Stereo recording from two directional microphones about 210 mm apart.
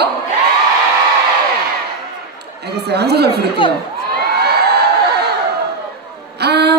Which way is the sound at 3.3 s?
25° left (ahead or behind).